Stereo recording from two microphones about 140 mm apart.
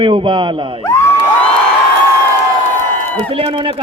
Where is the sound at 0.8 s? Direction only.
20° left (ahead or behind).